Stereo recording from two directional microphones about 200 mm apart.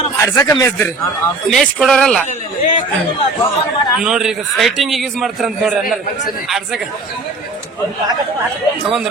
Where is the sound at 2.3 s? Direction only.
30° left (ahead or behind).